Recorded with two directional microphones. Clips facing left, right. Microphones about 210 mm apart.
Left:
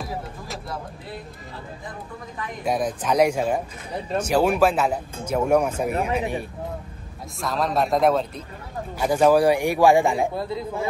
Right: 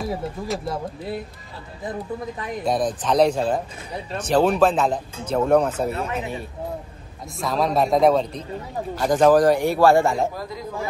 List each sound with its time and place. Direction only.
2.6 s a man's voice: 10° left (ahead or behind)
7.3 s a man's voice: centre (ahead or behind)
10.3 s speech: 25° left (ahead or behind)